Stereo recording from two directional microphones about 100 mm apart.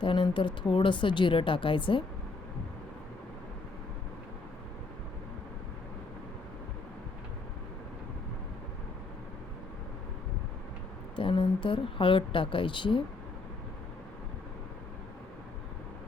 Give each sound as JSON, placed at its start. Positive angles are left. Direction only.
{"t": 0.0, "sound": "a woman's voice", "side_deg": 55}
{"t": 11.2, "sound": "a woman's voice", "side_deg": 60}